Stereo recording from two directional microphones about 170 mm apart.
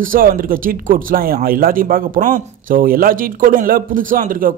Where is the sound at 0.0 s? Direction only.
55° right (ahead or behind).